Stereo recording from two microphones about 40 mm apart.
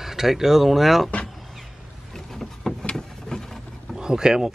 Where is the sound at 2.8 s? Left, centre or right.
Centre.